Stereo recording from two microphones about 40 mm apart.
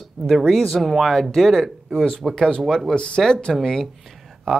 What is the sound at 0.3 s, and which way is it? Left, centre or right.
Speech, centre.